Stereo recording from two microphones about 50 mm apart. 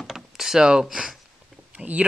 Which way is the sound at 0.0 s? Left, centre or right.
Centre.